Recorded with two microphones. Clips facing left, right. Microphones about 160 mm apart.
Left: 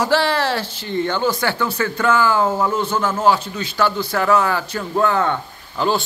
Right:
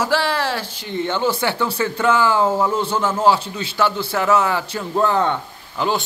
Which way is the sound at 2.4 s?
5° right (ahead or behind).